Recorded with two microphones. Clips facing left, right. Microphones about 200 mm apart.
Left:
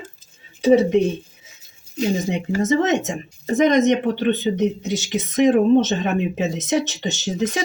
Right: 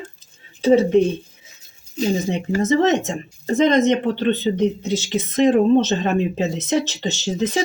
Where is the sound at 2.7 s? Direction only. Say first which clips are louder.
Right 2 dB; 15° left (ahead or behind).